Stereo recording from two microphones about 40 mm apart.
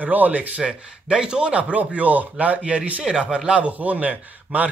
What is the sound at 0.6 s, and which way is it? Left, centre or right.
A man's voice, right.